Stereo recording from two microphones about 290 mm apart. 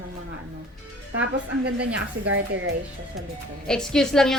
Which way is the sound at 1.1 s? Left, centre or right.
Right.